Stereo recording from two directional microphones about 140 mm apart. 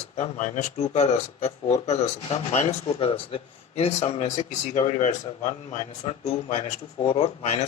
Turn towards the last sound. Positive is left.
turn(degrees=50)  # may be behind; listen again after turning